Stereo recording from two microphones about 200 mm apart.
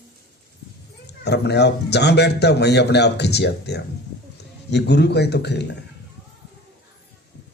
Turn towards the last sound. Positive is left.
turn(degrees=55)  # may be behind; listen again after turning